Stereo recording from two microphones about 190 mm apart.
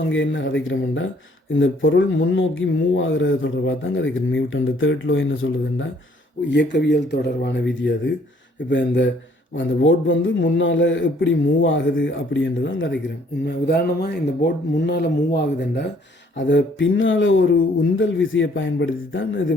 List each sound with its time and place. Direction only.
0.1 s a man's voice: 80° left
1.5 s speech: 90° left
6.5 s speech: 65° left (ahead or behind)
9.6 s a man's voice: 85° left
13.4 s speech: 55° left (ahead or behind)
16.5 s a man's voice: 75° left (ahead or behind)